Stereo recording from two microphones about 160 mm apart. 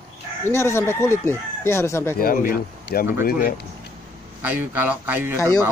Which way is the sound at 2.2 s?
70° left (ahead or behind).